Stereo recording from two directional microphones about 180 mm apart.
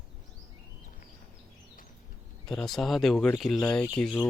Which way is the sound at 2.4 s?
Centre (ahead or behind).